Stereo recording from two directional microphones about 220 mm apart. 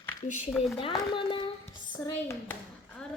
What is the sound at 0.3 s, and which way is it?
Speech, 35° left (ahead or behind).